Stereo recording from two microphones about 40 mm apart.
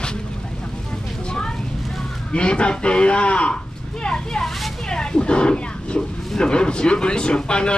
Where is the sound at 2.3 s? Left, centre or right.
Left.